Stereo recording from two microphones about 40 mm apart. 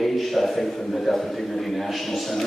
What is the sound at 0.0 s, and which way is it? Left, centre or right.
A man's voice, centre.